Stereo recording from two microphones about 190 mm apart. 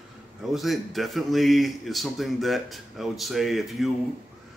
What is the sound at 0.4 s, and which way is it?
A man's voice, centre (ahead or behind).